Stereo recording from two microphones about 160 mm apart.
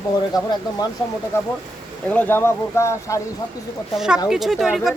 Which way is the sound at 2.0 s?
10° left (ahead or behind).